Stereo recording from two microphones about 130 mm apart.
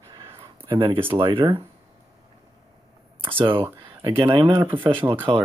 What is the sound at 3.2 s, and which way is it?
Speech, 40° right (ahead or behind).